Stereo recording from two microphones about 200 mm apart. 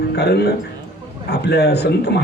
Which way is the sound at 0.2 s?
55° left (ahead or behind).